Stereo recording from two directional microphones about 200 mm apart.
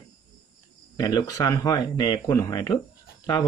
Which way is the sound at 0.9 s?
20° left (ahead or behind).